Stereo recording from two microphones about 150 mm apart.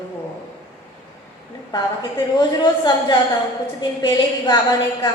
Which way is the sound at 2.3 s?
25° left (ahead or behind).